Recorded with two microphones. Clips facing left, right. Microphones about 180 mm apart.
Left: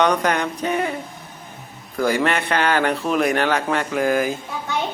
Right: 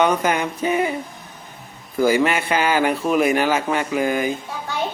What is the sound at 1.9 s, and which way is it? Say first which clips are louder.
A man's voice: right 2 dB; 5° right (ahead or behind).